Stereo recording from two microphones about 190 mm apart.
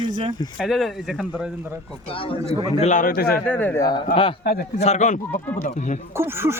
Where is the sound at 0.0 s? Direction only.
25° right (ahead or behind).